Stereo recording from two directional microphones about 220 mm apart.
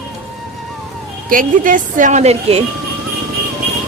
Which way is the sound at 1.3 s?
35° right (ahead or behind).